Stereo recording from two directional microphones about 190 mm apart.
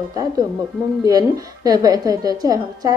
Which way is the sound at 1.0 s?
20° right (ahead or behind).